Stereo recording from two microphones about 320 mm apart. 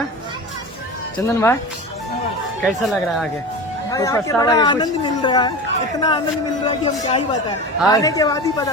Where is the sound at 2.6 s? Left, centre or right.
Centre.